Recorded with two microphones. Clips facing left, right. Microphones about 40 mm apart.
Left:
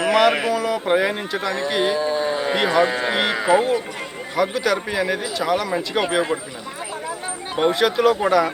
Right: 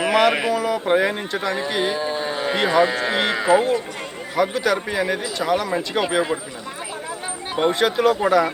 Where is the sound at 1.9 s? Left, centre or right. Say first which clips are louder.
Left 3 dB; right.